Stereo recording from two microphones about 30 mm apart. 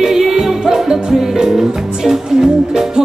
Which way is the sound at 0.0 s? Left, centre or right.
Centre.